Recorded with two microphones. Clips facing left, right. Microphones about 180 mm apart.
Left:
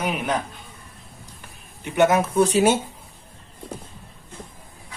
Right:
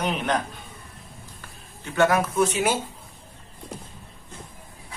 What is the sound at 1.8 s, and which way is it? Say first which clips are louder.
Speech: left 3 dB; 20° left (ahead or behind).